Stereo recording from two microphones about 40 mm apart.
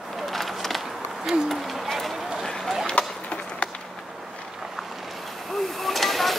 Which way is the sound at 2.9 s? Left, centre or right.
Left.